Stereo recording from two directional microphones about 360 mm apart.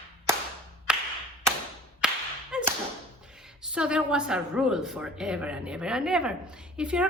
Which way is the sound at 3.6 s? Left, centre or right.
Centre.